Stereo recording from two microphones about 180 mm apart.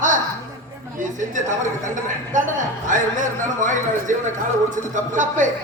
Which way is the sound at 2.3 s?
45° right (ahead or behind).